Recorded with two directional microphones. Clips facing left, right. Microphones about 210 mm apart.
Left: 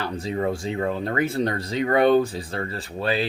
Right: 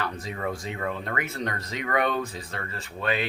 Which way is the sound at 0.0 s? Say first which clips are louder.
Left 6 dB; 30° left (ahead or behind).